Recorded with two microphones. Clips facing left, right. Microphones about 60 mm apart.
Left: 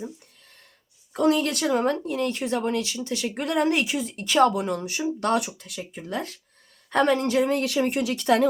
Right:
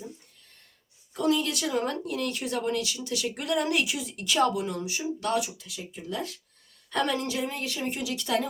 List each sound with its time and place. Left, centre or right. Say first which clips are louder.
1.1 s speech: left 4 dB; left